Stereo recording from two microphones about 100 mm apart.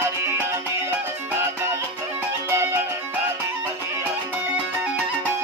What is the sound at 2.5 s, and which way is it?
Music, 20° right (ahead or behind).